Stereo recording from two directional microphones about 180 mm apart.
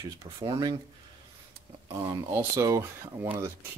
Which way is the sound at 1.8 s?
15° right (ahead or behind).